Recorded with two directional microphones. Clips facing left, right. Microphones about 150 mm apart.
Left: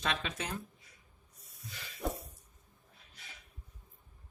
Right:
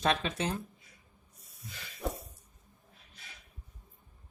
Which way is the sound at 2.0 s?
Centre (ahead or behind).